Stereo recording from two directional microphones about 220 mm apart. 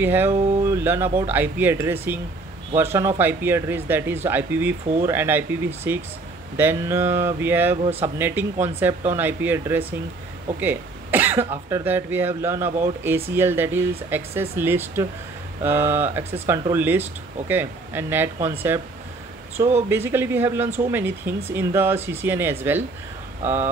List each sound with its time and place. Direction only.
0.0 s speech: 10° right (ahead or behind)
19.9 s speech: 10° right (ahead or behind)
23.4 s speech: 30° right (ahead or behind)